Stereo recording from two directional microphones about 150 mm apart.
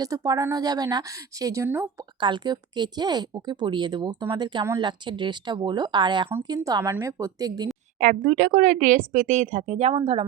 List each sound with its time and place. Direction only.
0.0 s speech: 25° right (ahead or behind)
2.2 s speech: 30° right (ahead or behind)
7.9 s speech: 60° right (ahead or behind); by 10.2 s 40° right (ahead or behind)